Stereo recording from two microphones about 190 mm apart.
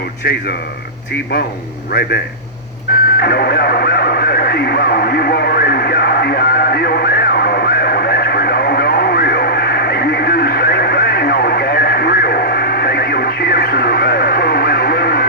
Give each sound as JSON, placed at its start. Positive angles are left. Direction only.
{"t": 0.2, "sound": "speech", "side_deg": 55}
{"t": 3.2, "sound": "radio", "side_deg": 55}